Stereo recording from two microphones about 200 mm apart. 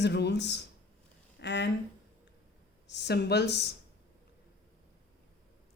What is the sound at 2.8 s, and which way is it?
Speech, 60° left (ahead or behind).